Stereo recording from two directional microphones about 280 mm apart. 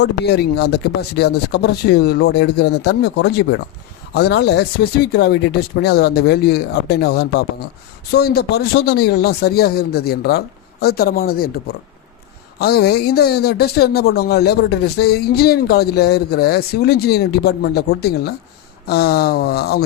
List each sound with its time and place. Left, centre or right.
0.0 s speech: left
12.5 s speech: left